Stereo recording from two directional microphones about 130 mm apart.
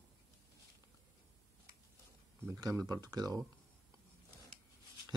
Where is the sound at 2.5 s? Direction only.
30° right (ahead or behind).